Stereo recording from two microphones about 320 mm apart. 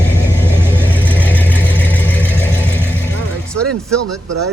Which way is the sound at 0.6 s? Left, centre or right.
Centre.